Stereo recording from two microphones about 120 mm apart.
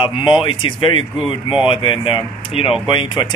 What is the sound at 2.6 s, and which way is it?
Speech, 55° left (ahead or behind).